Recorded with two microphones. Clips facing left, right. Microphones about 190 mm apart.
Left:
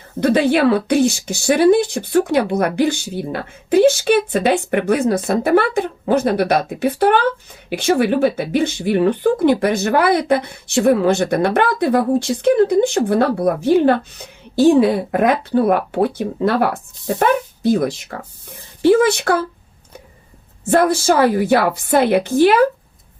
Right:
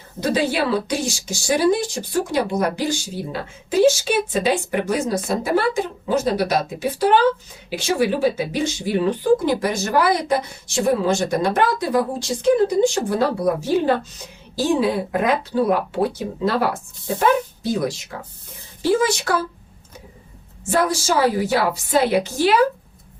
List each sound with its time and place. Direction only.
0.2 s speech: 60° left (ahead or behind)
20.7 s speech: 55° left (ahead or behind)